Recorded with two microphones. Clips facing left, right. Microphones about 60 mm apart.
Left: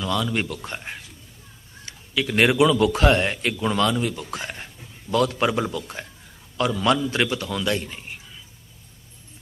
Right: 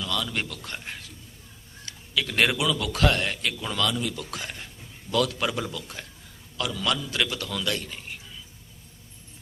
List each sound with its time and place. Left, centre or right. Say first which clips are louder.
0.0 s a man's voice: left 5 dB; left
1.8 s a sound: left 3 dB; left
2.2 s a man's voice: left 5 dB; centre
2.6 s a man's voice: left 7 dB; left
4.2 s a man's voice: left 3 dB; left
4.4 s a sound: left 4 dB; left
5.1 s a man's voice: left 5 dB; left